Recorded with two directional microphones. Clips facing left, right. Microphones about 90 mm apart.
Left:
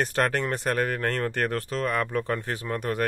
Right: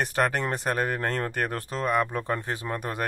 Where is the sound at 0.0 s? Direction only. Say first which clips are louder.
Even; 15° right (ahead or behind).